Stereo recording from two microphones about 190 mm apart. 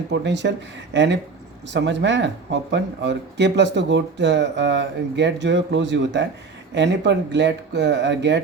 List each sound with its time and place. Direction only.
0.1 s speech: 65° right (ahead or behind)